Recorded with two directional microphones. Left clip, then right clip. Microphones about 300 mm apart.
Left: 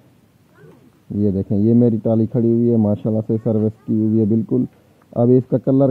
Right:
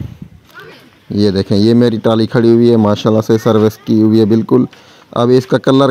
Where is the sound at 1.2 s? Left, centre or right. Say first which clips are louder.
Right 8 dB; right.